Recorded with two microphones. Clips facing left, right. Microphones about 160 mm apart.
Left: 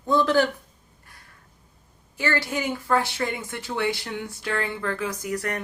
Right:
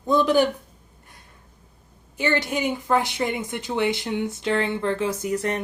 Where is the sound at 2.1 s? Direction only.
20° right (ahead or behind).